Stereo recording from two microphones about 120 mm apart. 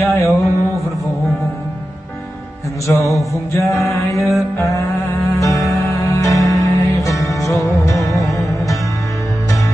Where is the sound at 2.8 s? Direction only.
25° left (ahead or behind).